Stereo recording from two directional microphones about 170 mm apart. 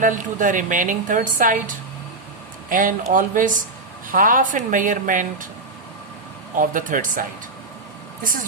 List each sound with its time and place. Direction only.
0.0 s a woman's voice: 50° right (ahead or behind)
6.6 s a woman's voice: 50° right (ahead or behind)